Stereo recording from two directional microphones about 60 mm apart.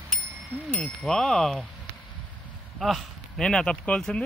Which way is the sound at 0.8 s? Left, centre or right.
Centre.